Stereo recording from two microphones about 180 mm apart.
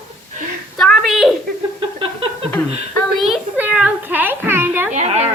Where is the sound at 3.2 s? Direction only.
5° right (ahead or behind).